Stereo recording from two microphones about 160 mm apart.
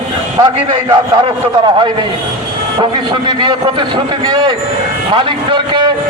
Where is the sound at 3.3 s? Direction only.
30° right (ahead or behind).